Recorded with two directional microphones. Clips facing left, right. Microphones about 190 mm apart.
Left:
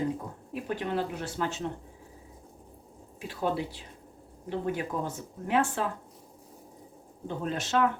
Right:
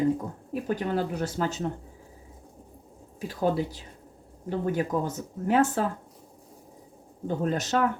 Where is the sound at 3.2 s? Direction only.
40° right (ahead or behind).